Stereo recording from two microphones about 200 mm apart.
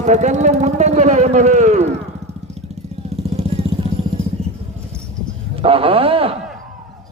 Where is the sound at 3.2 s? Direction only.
30° right (ahead or behind).